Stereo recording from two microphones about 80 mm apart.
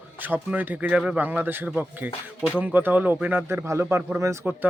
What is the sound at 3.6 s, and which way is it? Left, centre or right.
Speech, right.